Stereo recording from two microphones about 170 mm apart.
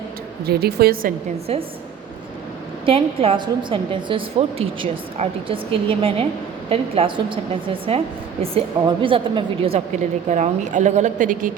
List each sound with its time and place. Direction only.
0.4 s a woman's voice: 70° right (ahead or behind)
2.8 s a woman's voice: 35° right (ahead or behind)
10.2 s a woman's voice: 45° right (ahead or behind)